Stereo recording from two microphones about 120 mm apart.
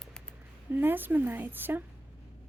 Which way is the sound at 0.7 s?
15° right (ahead or behind).